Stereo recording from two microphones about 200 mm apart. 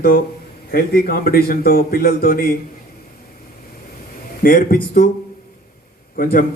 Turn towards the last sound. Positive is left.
turn(degrees=45)  # may be behind; listen again after turning